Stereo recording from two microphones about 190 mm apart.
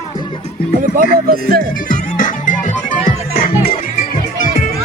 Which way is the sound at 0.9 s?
50° right (ahead or behind).